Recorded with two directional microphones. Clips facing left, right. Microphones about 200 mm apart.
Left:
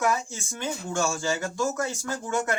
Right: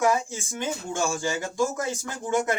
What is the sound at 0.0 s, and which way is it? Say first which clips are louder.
Speech: right 3 dB; 15° right (ahead or behind).